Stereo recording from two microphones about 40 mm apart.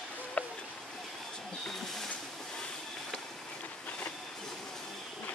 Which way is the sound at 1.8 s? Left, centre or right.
Centre.